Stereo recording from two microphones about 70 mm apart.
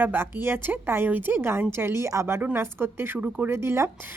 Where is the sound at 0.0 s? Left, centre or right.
Right.